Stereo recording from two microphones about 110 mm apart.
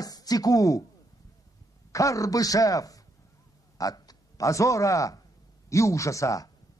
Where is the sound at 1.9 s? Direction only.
30° left (ahead or behind).